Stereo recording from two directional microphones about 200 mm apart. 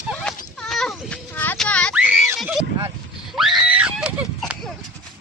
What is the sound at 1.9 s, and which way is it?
Neigh, 5° right (ahead or behind).